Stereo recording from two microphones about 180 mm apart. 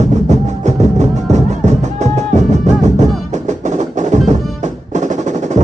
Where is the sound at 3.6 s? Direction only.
40° right (ahead or behind).